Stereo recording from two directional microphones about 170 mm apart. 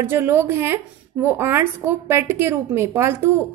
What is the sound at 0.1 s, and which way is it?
A woman's voice, 15° right (ahead or behind).